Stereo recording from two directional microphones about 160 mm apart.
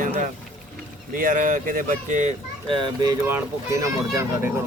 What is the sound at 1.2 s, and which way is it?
Speech, 55° right (ahead or behind).